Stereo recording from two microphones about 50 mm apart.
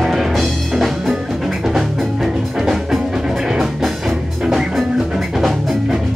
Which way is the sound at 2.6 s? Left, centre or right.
Centre.